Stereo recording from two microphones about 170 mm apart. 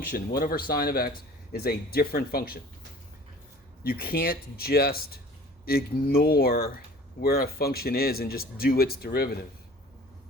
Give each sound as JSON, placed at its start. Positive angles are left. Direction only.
{"t": 0.1, "sound": "speech", "side_deg": 60}
{"t": 3.8, "sound": "speech", "side_deg": 65}